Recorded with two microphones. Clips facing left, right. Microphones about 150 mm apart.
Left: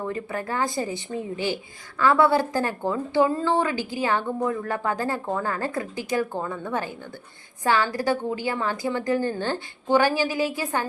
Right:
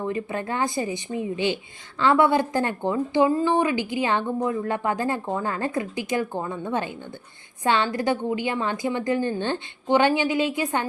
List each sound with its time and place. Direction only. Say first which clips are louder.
0.0 s speech: right 2 dB; 20° right (ahead or behind)